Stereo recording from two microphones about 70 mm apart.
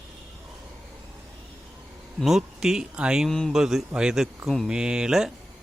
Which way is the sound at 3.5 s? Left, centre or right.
Centre.